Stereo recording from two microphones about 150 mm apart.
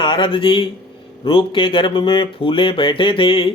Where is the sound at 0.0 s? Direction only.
35° left (ahead or behind).